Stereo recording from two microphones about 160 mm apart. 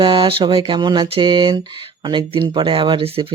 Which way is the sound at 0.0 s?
30° right (ahead or behind).